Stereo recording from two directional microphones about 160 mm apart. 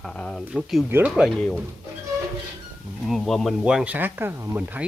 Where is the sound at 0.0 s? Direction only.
5° left (ahead or behind).